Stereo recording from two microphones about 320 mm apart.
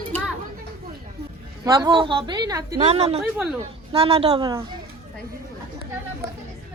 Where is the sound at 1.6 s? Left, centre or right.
Centre.